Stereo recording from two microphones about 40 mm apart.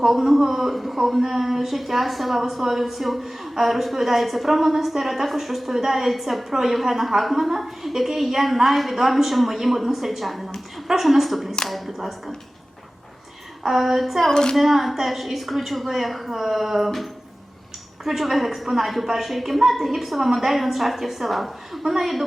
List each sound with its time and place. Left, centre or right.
0.0 s a man's voice: centre
13.6 s a man's voice: centre
14.3 s a woman's voice: centre
14.5 s a man's voice: centre